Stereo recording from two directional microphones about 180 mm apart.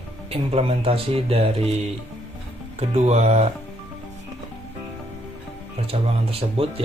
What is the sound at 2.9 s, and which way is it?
Speech, 40° right (ahead or behind).